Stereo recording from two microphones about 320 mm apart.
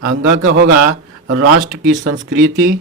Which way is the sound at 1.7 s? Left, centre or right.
Right.